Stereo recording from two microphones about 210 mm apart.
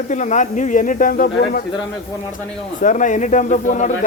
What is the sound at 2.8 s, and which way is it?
Speech, 35° left (ahead or behind).